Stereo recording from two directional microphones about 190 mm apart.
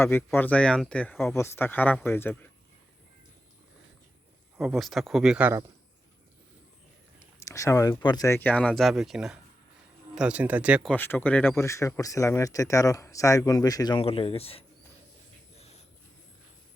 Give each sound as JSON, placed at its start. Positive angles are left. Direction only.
{"t": 0.0, "sound": "speech", "side_deg": 10}
{"t": 4.5, "sound": "speech", "side_deg": 0}
{"t": 7.3, "sound": "speech", "side_deg": 15}
{"t": 10.9, "sound": "speech", "side_deg": 10}
{"t": 14.0, "sound": "speech", "side_deg": 30}
{"t": 15.5, "sound": "a sound", "side_deg": 35}